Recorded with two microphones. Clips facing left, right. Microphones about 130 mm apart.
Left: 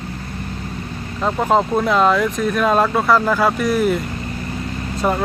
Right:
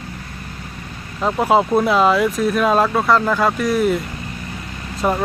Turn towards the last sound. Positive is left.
turn(degrees=0)  # may be behind; listen again after turning